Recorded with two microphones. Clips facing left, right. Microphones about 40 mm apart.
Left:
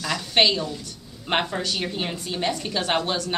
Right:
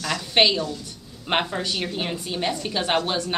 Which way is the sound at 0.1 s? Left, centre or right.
Centre.